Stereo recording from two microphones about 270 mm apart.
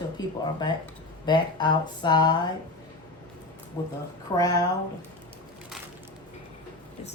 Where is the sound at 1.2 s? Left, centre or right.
Centre.